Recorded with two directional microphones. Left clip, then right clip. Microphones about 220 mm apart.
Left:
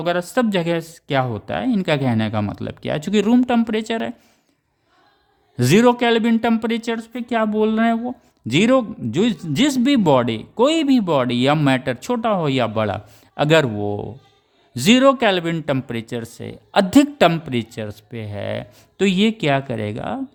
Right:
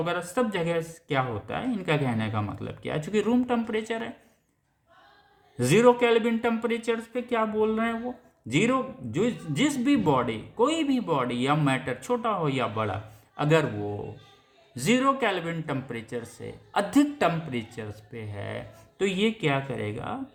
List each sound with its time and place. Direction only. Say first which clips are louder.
0.0 s a man's voice: left 7 dB; 55° left (ahead or behind)
5.5 s a man's voice: left 5 dB; 50° left (ahead or behind)